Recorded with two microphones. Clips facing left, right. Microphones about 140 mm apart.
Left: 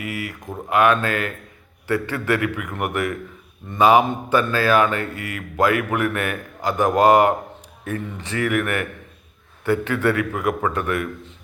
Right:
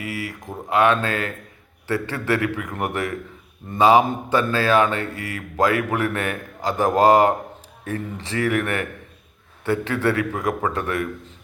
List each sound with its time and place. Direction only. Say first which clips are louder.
0.0 s speech: even; 30° right (ahead or behind)